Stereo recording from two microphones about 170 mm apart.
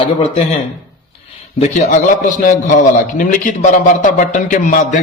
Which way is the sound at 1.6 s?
45° left (ahead or behind).